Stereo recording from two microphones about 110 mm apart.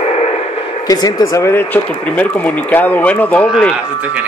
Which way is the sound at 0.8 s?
40° left (ahead or behind).